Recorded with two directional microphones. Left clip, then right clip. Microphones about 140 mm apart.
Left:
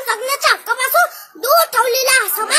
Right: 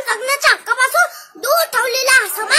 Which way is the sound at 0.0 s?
15° right (ahead or behind).